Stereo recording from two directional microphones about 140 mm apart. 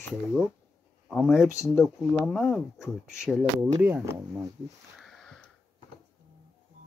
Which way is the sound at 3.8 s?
15° right (ahead or behind).